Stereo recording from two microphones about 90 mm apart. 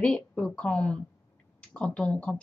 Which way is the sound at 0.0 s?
10° left (ahead or behind).